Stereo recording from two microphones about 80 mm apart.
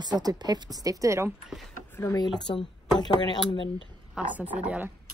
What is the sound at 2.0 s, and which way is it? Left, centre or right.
Speech, left.